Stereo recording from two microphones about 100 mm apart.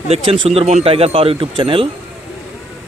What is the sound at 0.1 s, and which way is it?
Speech, 75° right (ahead or behind).